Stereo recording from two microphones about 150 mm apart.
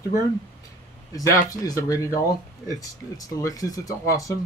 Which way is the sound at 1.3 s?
20° left (ahead or behind).